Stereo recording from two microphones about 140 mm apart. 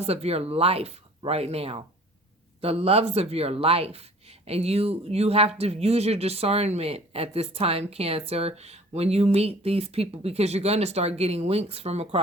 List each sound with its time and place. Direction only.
0.0 s speech: 45° right (ahead or behind)